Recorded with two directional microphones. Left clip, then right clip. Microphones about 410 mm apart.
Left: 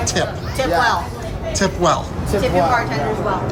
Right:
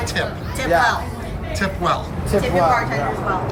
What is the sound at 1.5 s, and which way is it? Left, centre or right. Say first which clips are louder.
Speech: left 3 dB; centre.